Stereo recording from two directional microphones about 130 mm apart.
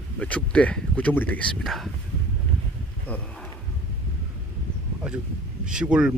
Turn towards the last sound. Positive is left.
turn(degrees=-5)  # may be behind; listen again after turning